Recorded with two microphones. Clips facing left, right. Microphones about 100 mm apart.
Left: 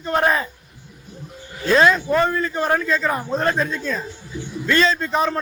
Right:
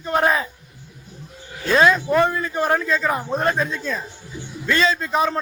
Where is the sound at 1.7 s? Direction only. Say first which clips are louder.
Even; 10° right (ahead or behind).